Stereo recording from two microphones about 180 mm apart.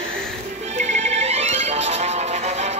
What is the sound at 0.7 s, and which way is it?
Music, 40° right (ahead or behind).